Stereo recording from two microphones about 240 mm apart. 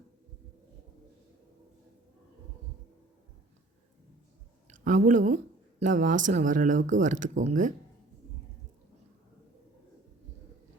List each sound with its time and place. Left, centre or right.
4.7 s a woman's voice: right